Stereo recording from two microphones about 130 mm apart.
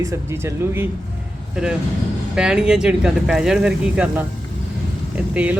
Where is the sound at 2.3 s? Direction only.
5° right (ahead or behind).